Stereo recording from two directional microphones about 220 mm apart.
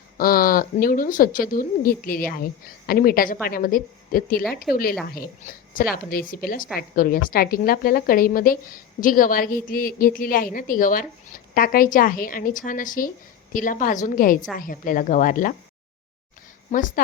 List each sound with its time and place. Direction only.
0.2 s a woman's voice: 40° left (ahead or behind)
16.7 s a woman's voice: 35° left (ahead or behind)